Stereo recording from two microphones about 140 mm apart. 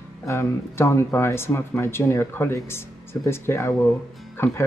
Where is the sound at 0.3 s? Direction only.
20° left (ahead or behind).